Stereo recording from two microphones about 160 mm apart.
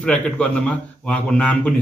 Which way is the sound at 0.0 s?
5° left (ahead or behind).